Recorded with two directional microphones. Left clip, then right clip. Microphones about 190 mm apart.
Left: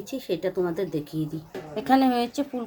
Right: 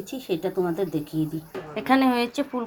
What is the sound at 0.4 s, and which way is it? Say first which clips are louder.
Speech: right 1 dB; 10° left (ahead or behind).